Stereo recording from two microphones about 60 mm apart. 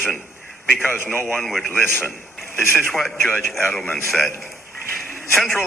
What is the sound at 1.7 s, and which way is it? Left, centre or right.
Speech, left.